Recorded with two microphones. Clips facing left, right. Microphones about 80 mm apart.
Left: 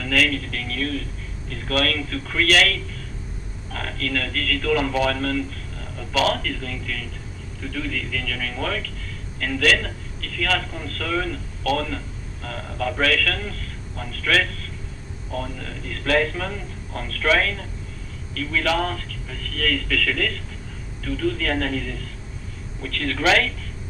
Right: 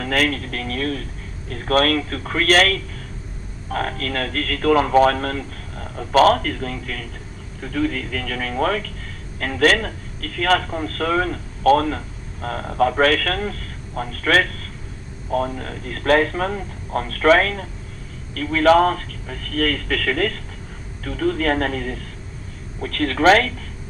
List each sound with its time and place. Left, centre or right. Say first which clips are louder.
0.0 s a man's voice: right 2 dB; right